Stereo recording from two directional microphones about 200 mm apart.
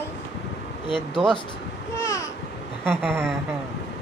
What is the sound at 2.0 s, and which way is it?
Babbling, 15° left (ahead or behind).